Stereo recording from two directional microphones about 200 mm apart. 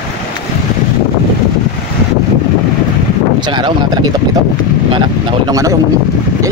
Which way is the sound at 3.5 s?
25° right (ahead or behind).